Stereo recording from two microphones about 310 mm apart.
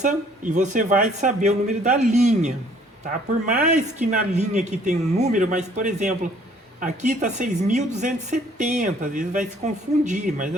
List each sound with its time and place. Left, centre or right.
0.5 s speech: right